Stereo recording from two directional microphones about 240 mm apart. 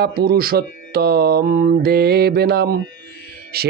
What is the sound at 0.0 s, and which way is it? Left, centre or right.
Speech, right.